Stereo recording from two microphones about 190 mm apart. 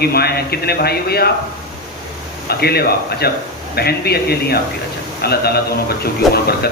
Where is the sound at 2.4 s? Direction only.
55° left (ahead or behind).